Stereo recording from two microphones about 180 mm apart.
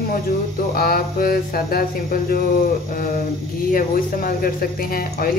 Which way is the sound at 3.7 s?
50° left (ahead or behind).